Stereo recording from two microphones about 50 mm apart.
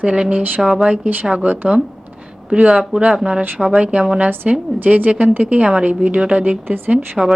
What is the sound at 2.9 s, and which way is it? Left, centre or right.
A woman's voice, centre.